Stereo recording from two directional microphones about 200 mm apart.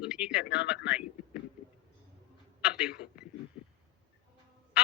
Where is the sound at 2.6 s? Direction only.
5° right (ahead or behind).